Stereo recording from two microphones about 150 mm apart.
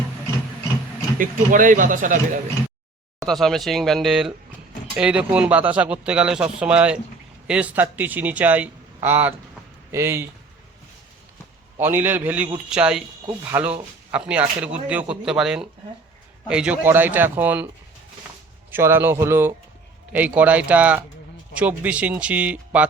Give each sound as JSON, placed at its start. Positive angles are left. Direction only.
{"t": 1.2, "sound": "speech", "side_deg": -60}
{"t": 3.2, "sound": "speech", "side_deg": 0}
{"t": 11.8, "sound": "speech", "side_deg": -15}
{"t": 18.7, "sound": "speech", "side_deg": -15}